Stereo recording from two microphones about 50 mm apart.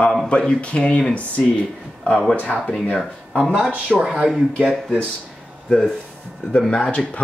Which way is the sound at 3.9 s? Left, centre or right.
Centre.